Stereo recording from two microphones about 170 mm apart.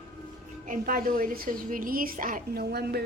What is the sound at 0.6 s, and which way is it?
A woman's voice, 50° right (ahead or behind).